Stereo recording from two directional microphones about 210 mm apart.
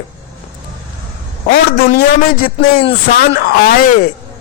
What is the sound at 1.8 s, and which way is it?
A man's voice, 35° left (ahead or behind).